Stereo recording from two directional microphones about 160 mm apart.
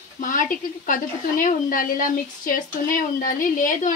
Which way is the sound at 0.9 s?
55° left (ahead or behind).